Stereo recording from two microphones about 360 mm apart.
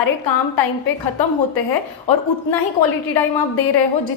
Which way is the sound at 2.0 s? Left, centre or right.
Left.